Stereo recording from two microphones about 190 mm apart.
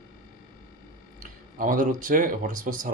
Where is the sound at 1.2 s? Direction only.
45° right (ahead or behind).